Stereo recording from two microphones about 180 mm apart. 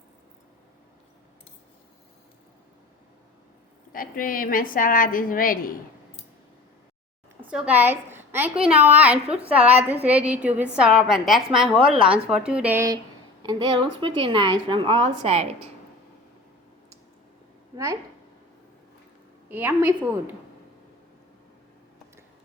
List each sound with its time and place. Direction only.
3.9 s a woman's voice: 50° left (ahead or behind)
7.5 s a woman's voice: 5° right (ahead or behind)
13.4 s a woman's voice: 25° right (ahead or behind)
19.5 s a woman's voice: 10° right (ahead or behind)